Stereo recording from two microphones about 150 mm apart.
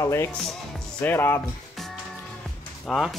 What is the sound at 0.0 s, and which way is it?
Speech, 15° left (ahead or behind).